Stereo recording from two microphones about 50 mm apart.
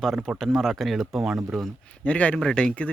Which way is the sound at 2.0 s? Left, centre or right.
Left.